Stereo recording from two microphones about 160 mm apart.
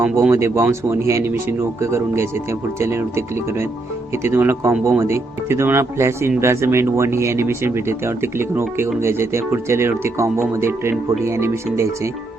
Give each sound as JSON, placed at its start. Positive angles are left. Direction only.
{"t": 0.0, "sound": "speech", "side_deg": -15}